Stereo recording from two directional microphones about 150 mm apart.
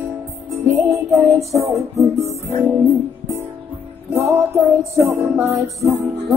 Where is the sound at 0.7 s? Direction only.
20° right (ahead or behind).